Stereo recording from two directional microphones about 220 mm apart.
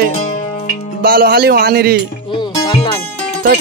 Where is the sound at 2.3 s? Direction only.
25° left (ahead or behind).